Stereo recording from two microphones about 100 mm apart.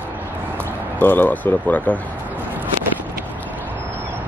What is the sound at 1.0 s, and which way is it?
Speech, 20° left (ahead or behind).